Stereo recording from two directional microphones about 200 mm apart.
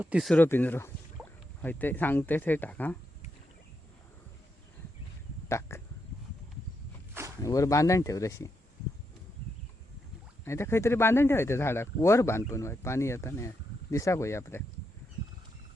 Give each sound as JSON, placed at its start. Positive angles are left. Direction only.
{"t": 0.0, "sound": "speech", "side_deg": -5}
{"t": 0.3, "sound": "speech", "side_deg": 10}
{"t": 5.5, "sound": "speech", "side_deg": 15}
{"t": 7.4, "sound": "speech", "side_deg": 15}
{"t": 10.4, "sound": "speech", "side_deg": 15}